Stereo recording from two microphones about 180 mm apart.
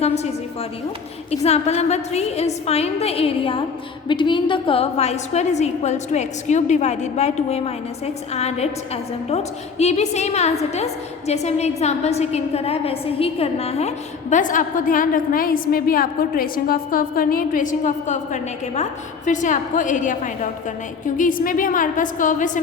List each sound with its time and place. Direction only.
0.0 s a woman's voice: 35° left (ahead or behind)
1.3 s a woman's voice: 35° left (ahead or behind)